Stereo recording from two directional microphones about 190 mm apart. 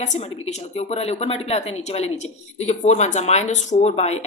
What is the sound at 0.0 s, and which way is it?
A woman's voice, 35° left (ahead or behind).